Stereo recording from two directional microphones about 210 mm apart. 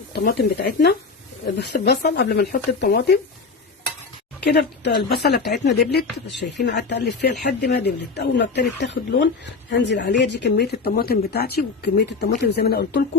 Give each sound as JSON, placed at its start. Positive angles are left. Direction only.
{"t": 0.1, "sound": "speech", "side_deg": 50}
{"t": 4.4, "sound": "speech", "side_deg": 50}